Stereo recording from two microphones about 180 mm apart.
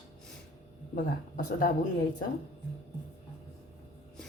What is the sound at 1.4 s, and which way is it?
Speech, 50° left (ahead or behind).